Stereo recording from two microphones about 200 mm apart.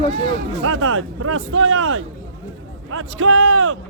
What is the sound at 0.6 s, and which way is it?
Speech, 90° right.